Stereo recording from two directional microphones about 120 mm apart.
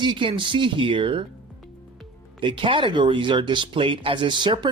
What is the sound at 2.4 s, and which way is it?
Speech, 45° right (ahead or behind).